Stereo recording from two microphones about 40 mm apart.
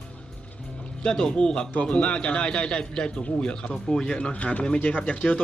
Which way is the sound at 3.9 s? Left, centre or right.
Centre.